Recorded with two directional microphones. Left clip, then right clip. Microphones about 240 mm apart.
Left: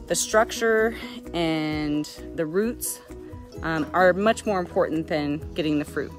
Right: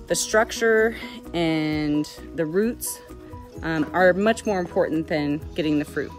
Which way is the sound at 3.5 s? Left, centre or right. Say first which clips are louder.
Even; centre.